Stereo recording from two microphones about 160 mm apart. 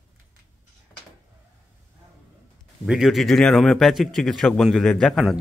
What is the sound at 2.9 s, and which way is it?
A man's voice, centre (ahead or behind).